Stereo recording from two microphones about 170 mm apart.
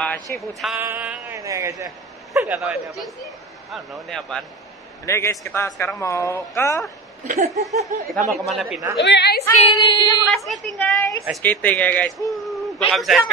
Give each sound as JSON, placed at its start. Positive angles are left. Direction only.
{"t": 0.0, "sound": "a sound", "side_deg": 10}
{"t": 0.7, "sound": "a sound", "side_deg": -10}
{"t": 1.4, "sound": "a man's voice", "side_deg": -20}
{"t": 2.3, "sound": "a woman's voice", "side_deg": -10}
{"t": 5.0, "sound": "speech", "side_deg": 15}
{"t": 7.2, "sound": "laughter", "side_deg": -45}
{"t": 7.6, "sound": "a woman's voice", "side_deg": 0}
{"t": 9.0, "sound": "a woman's voice", "side_deg": 85}
{"t": 9.4, "sound": "female singing", "side_deg": 25}
{"t": 10.2, "sound": "a woman's voice", "side_deg": 0}